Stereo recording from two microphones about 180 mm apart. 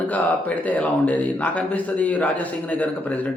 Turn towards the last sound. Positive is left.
turn(degrees=10)  # may be behind; listen again after turning